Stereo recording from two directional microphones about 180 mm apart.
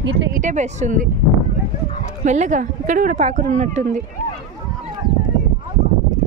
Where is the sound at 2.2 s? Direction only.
40° right (ahead or behind).